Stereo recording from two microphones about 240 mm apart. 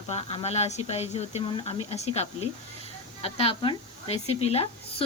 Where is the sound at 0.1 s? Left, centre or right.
Left.